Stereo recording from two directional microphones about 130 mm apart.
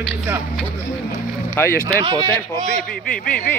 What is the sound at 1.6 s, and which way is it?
Speech, 20° left (ahead or behind).